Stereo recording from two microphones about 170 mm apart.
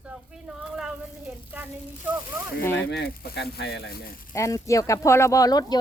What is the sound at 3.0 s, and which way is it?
Speech, 75° left (ahead or behind).